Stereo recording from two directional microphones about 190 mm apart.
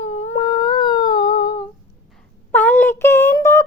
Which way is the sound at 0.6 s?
25° left (ahead or behind).